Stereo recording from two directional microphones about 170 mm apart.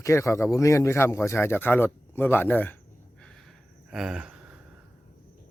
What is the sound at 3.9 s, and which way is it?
Speech, 5° right (ahead or behind).